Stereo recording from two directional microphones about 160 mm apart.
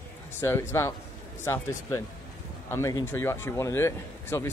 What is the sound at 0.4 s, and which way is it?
Speech, 15° left (ahead or behind).